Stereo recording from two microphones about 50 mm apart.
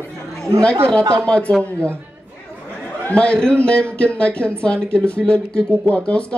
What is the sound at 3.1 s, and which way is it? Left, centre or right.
A man's voice, left.